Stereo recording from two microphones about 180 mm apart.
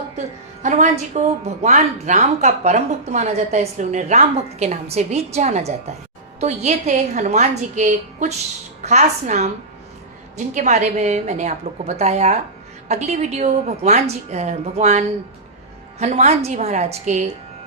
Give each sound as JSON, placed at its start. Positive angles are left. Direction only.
{"t": 0.6, "sound": "a woman's voice", "side_deg": -40}